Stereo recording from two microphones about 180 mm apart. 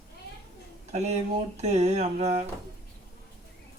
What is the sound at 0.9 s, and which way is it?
Speech, 40° right (ahead or behind).